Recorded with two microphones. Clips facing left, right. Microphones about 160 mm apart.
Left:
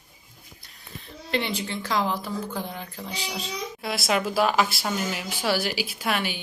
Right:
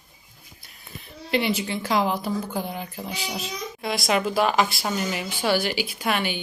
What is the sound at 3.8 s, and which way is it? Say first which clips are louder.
A woman's voice: right 2 dB; centre (ahead or behind).